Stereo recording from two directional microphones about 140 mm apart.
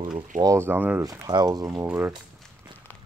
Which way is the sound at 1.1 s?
30° right (ahead or behind).